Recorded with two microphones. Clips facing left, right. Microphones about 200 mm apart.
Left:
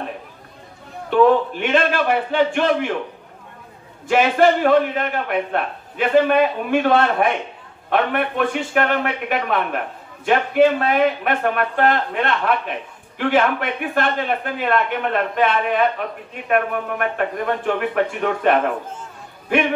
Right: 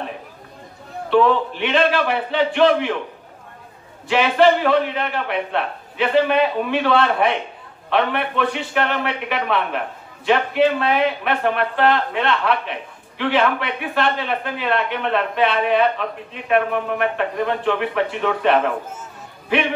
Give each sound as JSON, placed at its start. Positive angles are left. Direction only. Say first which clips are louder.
{"t": 1.1, "sound": "a man's voice", "louder": "left 2 dB", "side_deg": 50}
{"t": 4.1, "sound": "a man's voice", "louder": "even", "side_deg": 45}